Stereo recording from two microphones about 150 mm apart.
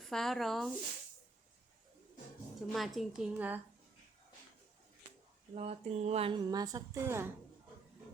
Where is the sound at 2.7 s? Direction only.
Centre (ahead or behind).